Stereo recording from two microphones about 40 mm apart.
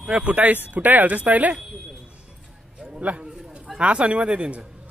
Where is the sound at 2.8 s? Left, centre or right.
Right.